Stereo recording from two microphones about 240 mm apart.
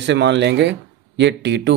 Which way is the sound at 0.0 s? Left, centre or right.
Right.